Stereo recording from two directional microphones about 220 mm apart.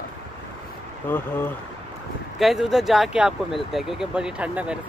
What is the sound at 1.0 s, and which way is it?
Speech, 10° left (ahead or behind).